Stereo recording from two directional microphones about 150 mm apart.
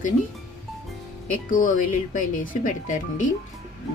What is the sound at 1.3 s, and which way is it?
Speech, 65° left (ahead or behind).